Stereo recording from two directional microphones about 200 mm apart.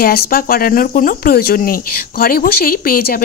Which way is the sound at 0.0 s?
50° left (ahead or behind).